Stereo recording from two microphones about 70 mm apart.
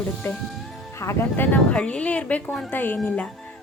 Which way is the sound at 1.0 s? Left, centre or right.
Left.